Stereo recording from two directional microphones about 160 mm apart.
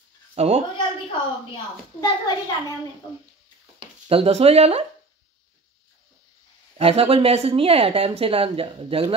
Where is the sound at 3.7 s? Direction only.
35° right (ahead or behind).